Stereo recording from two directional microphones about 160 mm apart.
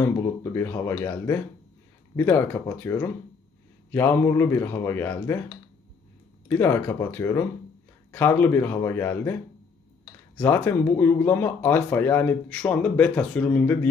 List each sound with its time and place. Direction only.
0.0 s speech: 15° left (ahead or behind)